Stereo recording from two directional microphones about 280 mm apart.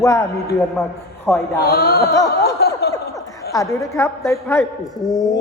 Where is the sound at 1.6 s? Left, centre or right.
Left.